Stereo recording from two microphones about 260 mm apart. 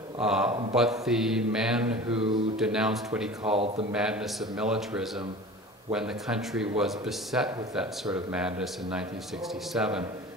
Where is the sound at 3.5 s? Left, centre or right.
Right.